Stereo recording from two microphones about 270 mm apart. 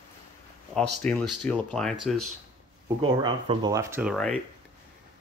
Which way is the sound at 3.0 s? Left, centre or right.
Centre.